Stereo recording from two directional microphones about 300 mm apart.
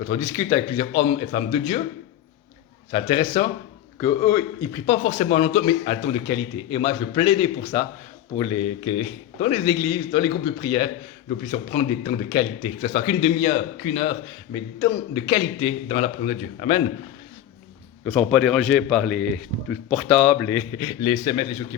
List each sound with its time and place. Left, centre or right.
0.1 s a man's voice: centre
2.9 s a man's voice: centre
18.0 s a man's voice: centre